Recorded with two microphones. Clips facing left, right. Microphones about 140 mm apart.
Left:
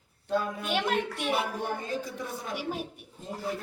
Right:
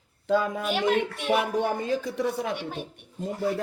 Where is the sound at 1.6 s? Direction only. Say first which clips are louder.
Right 6 dB; 80° right.